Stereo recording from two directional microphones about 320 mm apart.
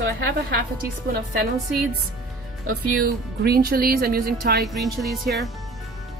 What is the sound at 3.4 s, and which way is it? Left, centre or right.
A woman's voice, right.